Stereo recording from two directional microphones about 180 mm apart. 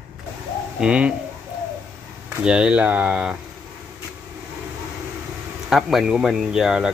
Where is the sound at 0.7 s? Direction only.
5° right (ahead or behind).